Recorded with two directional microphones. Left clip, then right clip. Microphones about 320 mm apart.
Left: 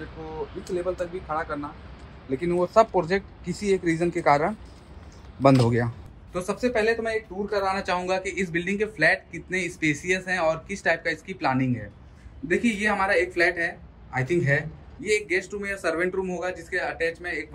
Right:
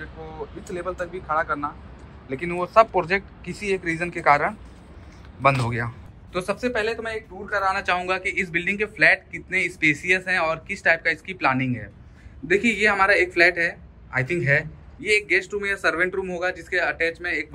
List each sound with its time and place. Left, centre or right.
0.0 s speech: centre
0.7 s a man's voice: centre
3.0 s speech: centre
3.6 s a man's voice: centre
6.3 s a man's voice: centre
6.7 s speech: left
7.0 s a man's voice: centre